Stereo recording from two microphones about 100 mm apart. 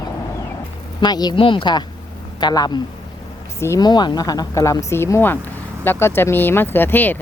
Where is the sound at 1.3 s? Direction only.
60° left (ahead or behind).